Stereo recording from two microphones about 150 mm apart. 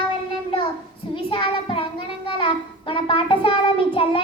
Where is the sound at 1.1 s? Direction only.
35° left (ahead or behind).